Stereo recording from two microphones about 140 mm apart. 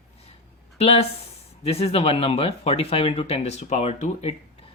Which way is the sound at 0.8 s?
45° left (ahead or behind).